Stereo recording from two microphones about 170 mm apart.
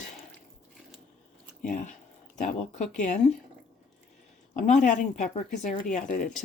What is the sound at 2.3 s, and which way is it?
Speech, 45° left (ahead or behind).